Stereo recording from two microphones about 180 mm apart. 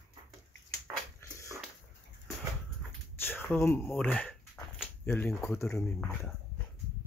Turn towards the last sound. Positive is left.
turn(degrees=15)  # may be behind; listen again after turning